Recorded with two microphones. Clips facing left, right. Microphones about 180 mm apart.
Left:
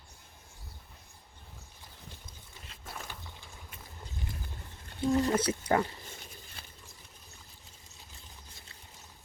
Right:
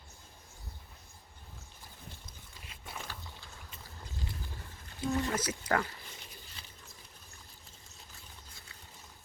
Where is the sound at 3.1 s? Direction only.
15° left (ahead or behind).